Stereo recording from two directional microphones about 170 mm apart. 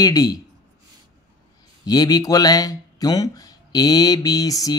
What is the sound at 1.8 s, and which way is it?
Speech, 20° left (ahead or behind).